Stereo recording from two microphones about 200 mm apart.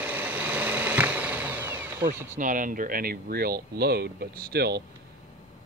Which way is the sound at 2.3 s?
40° right (ahead or behind).